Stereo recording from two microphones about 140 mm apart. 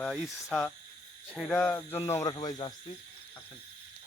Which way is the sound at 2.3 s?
30° left (ahead or behind).